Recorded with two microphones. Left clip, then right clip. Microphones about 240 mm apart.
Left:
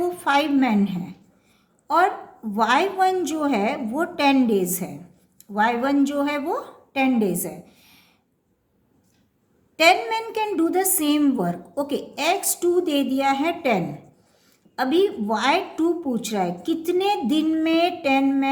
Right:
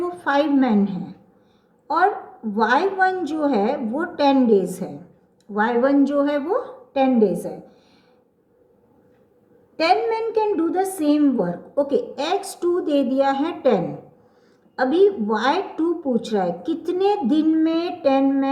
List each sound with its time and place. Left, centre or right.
0.0 s a woman's voice: left
2.6 s a woman's voice: left
9.7 s a woman's voice: left